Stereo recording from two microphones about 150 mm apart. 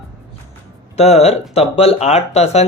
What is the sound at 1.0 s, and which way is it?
Speech, 45° left (ahead or behind).